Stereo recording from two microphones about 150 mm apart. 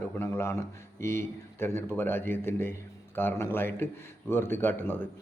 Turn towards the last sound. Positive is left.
turn(degrees=15)  # may be behind; listen again after turning